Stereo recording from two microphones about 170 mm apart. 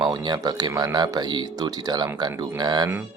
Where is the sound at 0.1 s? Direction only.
25° right (ahead or behind).